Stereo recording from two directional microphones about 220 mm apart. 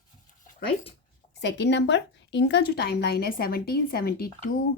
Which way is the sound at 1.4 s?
55° left (ahead or behind).